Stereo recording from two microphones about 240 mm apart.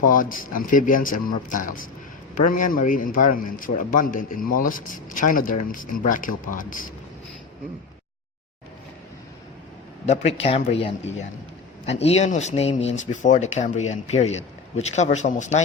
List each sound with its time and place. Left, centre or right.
0.0 s a man's voice: left
10.1 s speech: left